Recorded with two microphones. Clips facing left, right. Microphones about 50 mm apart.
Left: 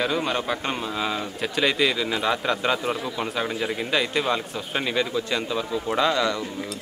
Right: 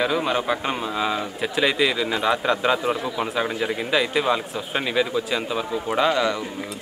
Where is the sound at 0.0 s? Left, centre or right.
Centre.